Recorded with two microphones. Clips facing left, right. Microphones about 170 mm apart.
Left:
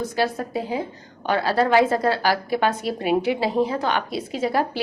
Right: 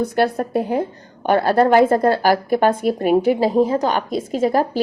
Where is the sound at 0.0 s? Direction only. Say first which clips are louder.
Right 5 dB; 60° right (ahead or behind).